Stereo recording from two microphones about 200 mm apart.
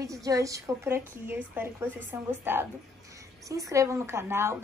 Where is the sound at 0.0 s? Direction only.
15° right (ahead or behind).